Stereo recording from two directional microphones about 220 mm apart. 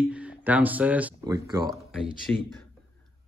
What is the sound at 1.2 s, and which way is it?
Speech, 15° right (ahead or behind).